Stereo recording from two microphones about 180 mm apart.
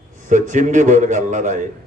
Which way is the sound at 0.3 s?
45° right (ahead or behind).